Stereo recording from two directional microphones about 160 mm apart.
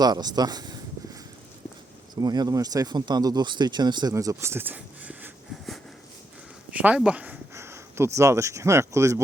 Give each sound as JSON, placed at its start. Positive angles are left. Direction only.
{"t": 0.0, "sound": "a sound", "side_deg": -25}
{"t": 2.2, "sound": "speech", "side_deg": -25}
{"t": 6.7, "sound": "speech", "side_deg": -10}